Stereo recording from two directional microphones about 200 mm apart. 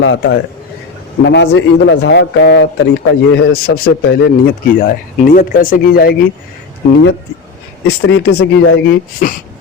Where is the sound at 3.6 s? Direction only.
50° left (ahead or behind).